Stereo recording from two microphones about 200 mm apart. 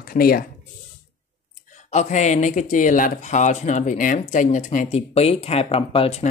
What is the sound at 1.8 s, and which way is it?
Speech, 35° left (ahead or behind).